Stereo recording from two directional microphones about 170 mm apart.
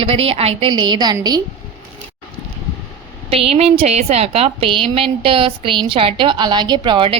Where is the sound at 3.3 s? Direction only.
35° right (ahead or behind).